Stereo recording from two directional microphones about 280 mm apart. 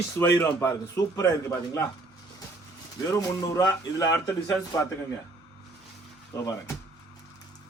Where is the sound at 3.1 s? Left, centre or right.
Centre.